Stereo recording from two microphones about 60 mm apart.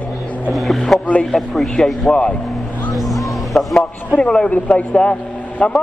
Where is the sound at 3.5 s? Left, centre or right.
Centre.